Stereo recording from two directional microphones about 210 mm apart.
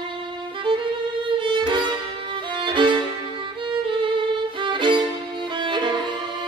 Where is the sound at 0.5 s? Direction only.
25° right (ahead or behind).